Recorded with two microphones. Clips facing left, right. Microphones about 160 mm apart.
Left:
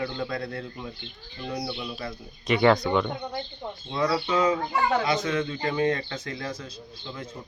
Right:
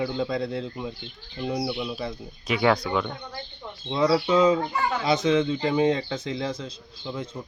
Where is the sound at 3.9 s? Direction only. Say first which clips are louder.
Right 4 dB; 25° right (ahead or behind).